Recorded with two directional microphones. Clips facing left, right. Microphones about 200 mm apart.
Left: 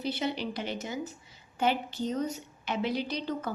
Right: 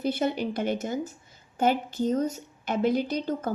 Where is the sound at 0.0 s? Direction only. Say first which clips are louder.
Right 5 dB; 50° right (ahead or behind).